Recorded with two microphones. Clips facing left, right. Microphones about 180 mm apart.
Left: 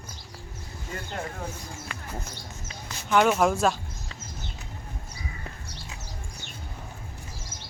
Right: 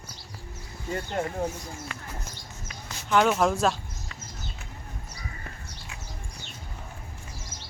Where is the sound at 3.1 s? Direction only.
5° left (ahead or behind).